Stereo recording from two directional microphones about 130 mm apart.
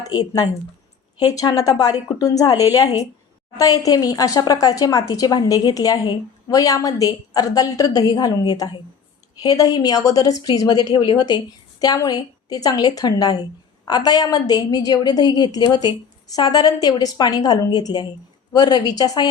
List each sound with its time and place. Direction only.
0.0 s a woman's voice: 30° left (ahead or behind)